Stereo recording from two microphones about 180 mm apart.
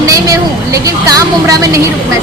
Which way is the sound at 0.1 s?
20° right (ahead or behind).